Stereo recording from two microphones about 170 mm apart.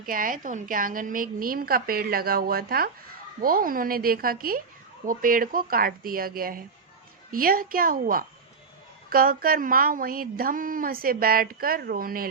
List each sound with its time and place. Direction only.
0.0 s a woman's voice: 55° right (ahead or behind)